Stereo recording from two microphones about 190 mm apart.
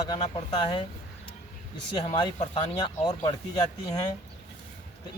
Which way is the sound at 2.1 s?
25° left (ahead or behind).